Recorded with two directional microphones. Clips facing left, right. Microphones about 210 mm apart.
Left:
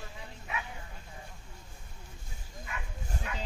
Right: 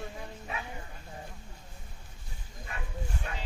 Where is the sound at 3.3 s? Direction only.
35° right (ahead or behind).